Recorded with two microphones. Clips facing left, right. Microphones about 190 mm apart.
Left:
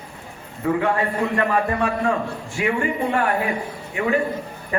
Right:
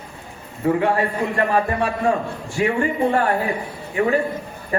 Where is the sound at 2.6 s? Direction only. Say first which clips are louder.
Right 3 dB; 35° right (ahead or behind).